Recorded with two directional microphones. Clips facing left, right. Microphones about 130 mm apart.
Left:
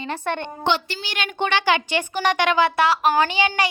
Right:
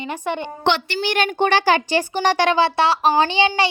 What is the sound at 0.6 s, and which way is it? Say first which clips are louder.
Speech: right 3 dB; 70° right (ahead or behind).